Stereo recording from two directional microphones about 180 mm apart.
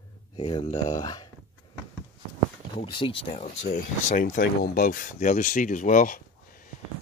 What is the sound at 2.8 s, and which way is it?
Speech, 30° left (ahead or behind).